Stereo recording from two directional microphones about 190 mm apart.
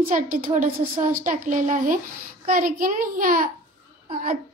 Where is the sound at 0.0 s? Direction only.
45° right (ahead or behind).